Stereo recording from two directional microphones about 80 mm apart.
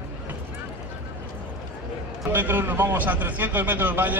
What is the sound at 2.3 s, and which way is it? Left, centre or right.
A man's voice, right.